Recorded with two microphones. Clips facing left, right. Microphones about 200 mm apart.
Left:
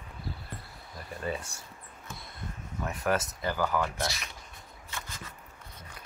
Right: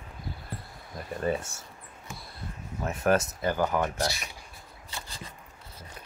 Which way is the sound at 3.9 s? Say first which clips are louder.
Right 4 dB; 30° right (ahead or behind).